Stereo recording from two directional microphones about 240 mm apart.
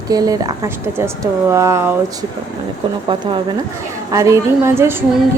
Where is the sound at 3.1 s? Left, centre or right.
Centre.